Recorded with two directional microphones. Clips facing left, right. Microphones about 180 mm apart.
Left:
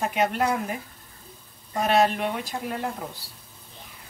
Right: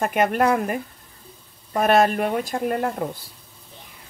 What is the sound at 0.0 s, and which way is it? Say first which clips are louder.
Speech: right 4 dB; 55° right (ahead or behind).